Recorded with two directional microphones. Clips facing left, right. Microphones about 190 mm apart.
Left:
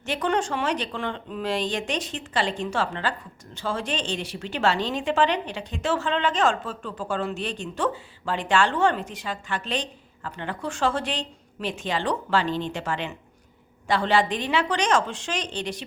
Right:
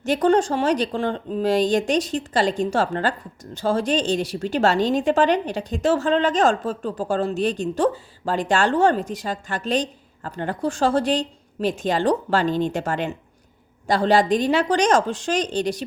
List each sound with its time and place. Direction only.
0.0 s speech: 40° right (ahead or behind)